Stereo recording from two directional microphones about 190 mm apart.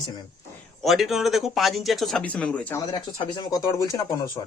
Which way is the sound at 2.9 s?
25° left (ahead or behind).